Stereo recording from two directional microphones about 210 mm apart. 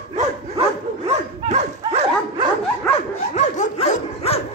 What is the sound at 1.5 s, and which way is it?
Dog, 30° right (ahead or behind).